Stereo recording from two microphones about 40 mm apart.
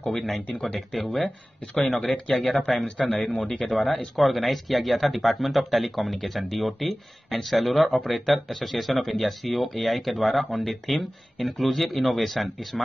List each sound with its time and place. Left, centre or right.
0.6 s speech: centre
0.9 s speech: centre